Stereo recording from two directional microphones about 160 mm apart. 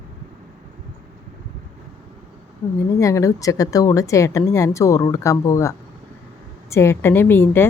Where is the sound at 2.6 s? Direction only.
15° left (ahead or behind).